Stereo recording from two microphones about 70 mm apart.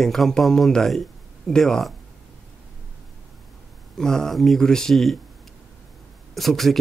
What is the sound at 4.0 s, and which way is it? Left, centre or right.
Speech, centre.